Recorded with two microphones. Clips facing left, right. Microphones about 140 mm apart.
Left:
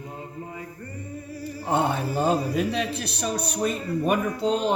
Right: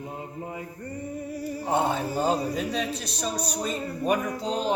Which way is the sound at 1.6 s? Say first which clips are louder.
Left 1 dB; 60° left (ahead or behind).